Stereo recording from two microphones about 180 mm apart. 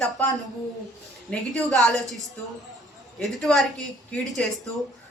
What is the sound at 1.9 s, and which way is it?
A man's voice, centre (ahead or behind).